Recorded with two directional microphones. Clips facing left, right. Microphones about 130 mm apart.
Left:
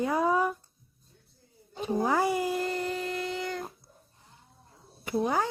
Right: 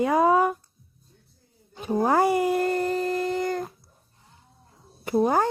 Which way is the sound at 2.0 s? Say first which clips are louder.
Right 7 dB; 55° right (ahead or behind).